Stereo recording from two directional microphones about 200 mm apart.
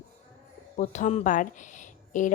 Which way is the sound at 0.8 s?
35° left (ahead or behind).